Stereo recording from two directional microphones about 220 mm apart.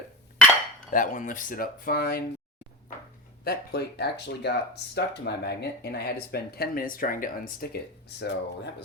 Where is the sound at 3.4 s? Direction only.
45° left (ahead or behind).